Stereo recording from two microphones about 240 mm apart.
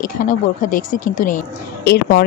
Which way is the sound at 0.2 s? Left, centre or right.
Left.